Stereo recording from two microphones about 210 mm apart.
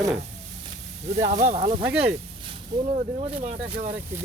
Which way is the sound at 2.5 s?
30° right (ahead or behind).